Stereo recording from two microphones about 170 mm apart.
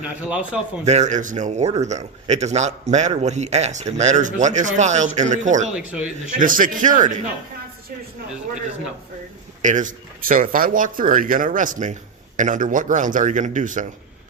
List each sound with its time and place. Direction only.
0.0 s speech: 5° right (ahead or behind)
0.9 s speech: 45° right (ahead or behind)
5.6 s speech: 5° right (ahead or behind)
6.4 s speech: 50° right (ahead or behind)
9.6 s speech: 45° right (ahead or behind)